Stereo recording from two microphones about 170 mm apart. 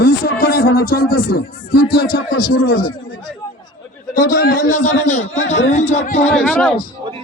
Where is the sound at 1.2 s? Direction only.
55° left (ahead or behind).